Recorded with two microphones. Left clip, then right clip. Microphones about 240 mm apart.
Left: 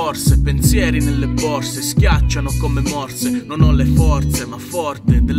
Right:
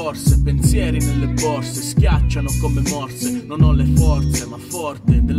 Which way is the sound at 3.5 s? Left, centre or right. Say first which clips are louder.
Left 2 dB; centre.